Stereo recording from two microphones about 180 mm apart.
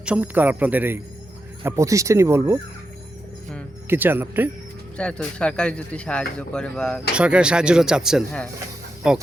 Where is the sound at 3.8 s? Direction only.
10° right (ahead or behind).